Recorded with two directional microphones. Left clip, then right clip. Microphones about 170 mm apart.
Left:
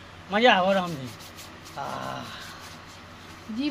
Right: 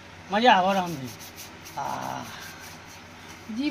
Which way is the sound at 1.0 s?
10° left (ahead or behind).